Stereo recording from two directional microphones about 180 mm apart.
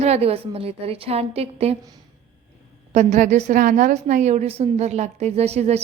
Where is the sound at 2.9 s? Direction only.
40° right (ahead or behind).